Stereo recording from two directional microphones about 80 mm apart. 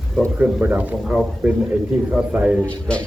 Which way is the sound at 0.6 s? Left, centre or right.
Centre.